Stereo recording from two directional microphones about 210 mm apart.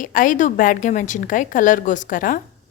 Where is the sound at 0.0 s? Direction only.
40° left (ahead or behind).